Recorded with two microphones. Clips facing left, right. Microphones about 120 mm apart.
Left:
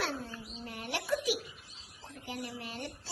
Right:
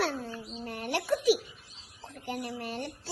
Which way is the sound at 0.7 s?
50° right (ahead or behind).